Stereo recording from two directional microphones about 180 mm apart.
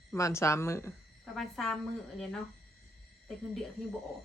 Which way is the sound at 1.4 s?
5° left (ahead or behind).